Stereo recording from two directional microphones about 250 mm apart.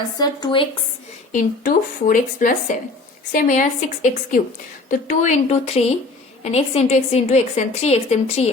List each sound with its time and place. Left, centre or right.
0.2 s speech: centre
1.3 s a woman's voice: left